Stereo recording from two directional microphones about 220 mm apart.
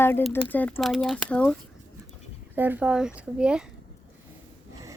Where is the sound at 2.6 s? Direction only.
10° right (ahead or behind).